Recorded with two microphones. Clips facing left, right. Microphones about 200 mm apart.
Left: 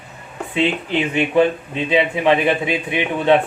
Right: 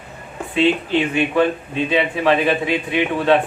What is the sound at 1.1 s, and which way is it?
A man's voice, 20° left (ahead or behind).